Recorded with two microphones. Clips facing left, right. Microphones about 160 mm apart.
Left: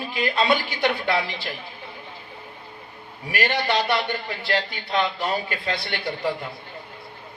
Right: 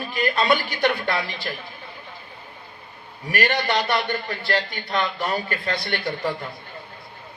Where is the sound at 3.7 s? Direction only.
45° right (ahead or behind).